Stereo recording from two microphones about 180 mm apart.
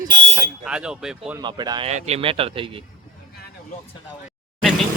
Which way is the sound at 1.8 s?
35° right (ahead or behind).